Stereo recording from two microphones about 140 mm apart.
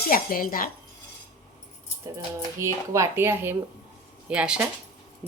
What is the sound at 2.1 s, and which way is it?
A woman's voice, 20° right (ahead or behind).